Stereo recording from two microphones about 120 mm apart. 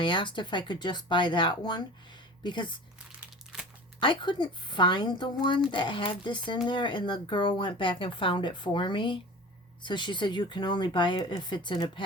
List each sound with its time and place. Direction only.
0.0 s speech: 40° left (ahead or behind)
4.0 s speech: 40° left (ahead or behind)